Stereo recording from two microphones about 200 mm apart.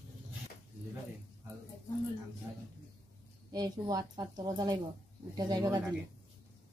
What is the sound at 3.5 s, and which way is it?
A woman's voice, 20° right (ahead or behind).